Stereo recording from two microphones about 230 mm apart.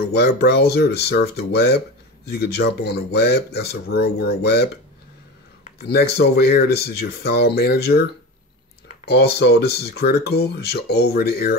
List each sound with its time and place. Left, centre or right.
0.0 s speech: left
5.8 s speech: left
9.0 s speech: left